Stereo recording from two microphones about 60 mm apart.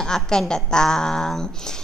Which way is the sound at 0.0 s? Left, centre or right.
Centre.